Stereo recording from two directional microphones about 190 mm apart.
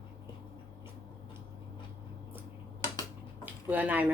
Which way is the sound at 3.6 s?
10° right (ahead or behind).